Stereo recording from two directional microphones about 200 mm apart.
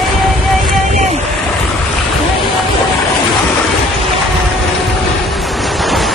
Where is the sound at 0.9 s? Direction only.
35° right (ahead or behind).